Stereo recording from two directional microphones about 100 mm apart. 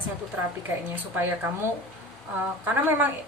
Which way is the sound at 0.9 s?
20° right (ahead or behind).